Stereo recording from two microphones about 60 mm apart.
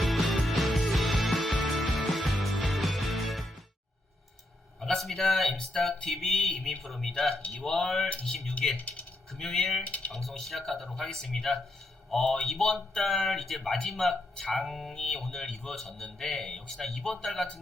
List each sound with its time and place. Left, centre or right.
0.0 s music: centre
4.8 s a sound: centre
5.5 s speech: centre
9.8 s speech: left
10.1 s speech: centre